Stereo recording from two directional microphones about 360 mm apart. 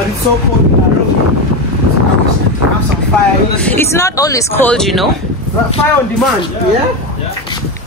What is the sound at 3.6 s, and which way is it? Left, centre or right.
Speech, centre.